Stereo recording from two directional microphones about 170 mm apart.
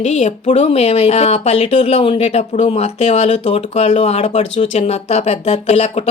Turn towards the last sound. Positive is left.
turn(degrees=40)  # may be behind; listen again after turning